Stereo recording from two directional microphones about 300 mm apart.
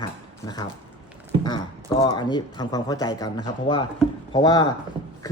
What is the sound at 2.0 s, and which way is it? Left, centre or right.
A man's voice, centre.